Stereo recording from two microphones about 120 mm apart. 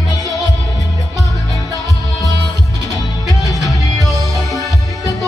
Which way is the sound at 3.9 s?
Centre (ahead or behind).